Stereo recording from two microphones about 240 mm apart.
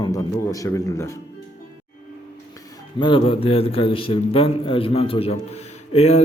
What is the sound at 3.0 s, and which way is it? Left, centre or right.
A man's voice, left.